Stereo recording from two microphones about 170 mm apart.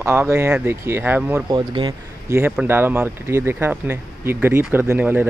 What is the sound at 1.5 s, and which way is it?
Speech, 25° right (ahead or behind).